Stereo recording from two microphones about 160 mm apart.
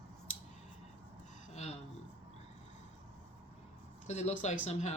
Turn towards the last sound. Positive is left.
turn(degrees=45)  # may be behind; listen again after turning